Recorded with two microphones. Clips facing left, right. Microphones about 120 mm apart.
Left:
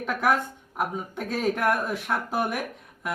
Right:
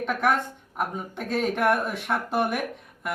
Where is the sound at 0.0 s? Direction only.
Centre (ahead or behind).